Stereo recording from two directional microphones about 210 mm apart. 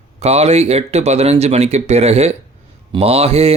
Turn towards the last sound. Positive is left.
turn(degrees=-30)  # may be behind; listen again after turning